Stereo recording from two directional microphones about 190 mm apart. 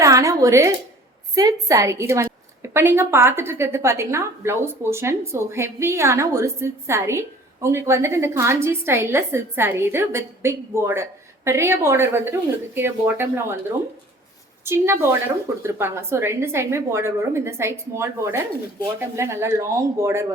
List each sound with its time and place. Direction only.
0.0 s a sound: 15° right (ahead or behind)
1.4 s a woman's voice: 20° right (ahead or behind)
14.6 s a woman's voice: 15° right (ahead or behind)